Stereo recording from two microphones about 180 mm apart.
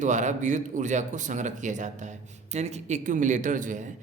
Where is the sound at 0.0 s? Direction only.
45° right (ahead or behind).